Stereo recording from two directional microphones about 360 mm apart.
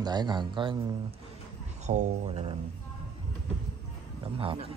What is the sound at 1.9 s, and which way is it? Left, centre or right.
Speech, centre.